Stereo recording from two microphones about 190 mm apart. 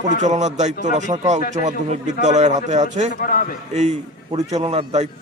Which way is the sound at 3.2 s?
50° left (ahead or behind).